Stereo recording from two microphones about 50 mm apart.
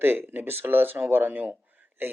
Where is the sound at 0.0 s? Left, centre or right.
Right.